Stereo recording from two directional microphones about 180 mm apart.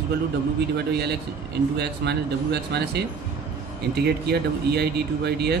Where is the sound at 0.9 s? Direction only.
65° right (ahead or behind).